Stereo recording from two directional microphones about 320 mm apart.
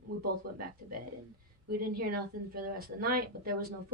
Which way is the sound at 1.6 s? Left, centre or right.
Right.